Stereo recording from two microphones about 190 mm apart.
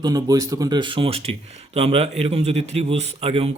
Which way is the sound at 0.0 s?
20° right (ahead or behind).